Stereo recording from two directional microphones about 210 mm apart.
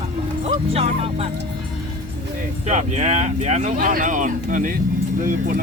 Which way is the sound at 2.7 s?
35° right (ahead or behind).